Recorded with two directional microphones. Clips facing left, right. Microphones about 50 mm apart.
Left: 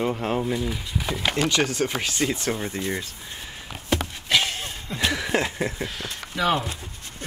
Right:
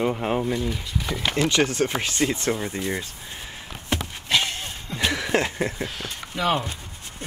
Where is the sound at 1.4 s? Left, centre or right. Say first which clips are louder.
Right 3 dB; right; by 3.1 s centre.